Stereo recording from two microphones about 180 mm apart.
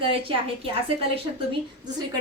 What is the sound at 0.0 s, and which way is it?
Speech, 30° right (ahead or behind).